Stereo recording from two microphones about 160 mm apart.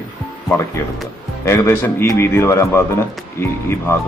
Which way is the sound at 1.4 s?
15° left (ahead or behind).